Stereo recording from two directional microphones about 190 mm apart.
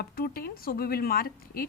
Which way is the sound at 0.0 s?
50° left (ahead or behind).